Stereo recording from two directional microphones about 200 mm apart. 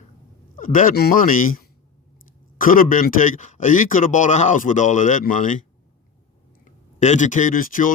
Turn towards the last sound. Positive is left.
turn(degrees=40)  # may be behind; listen again after turning